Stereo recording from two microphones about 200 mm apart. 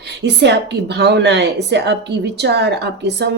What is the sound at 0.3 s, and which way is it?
A woman's voice, 55° right (ahead or behind).